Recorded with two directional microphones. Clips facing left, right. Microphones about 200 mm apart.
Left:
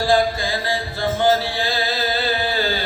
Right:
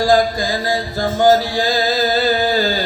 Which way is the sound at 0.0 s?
40° right (ahead or behind).